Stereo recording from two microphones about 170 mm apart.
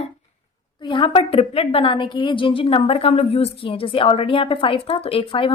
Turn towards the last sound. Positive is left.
turn(degrees=30)  # may be behind; listen again after turning